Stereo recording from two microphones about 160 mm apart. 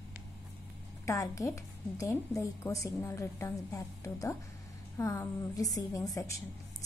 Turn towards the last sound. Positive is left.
turn(degrees=20)  # may be behind; listen again after turning